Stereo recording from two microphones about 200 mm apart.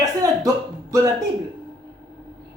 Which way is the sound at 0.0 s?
15° right (ahead or behind).